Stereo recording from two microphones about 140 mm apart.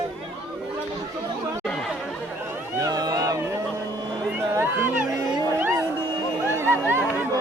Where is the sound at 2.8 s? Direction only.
30° right (ahead or behind).